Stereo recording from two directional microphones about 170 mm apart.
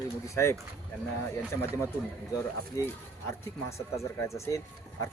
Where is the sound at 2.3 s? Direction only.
20° left (ahead or behind).